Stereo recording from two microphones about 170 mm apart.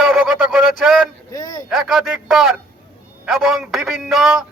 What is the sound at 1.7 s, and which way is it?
Speech, centre (ahead or behind).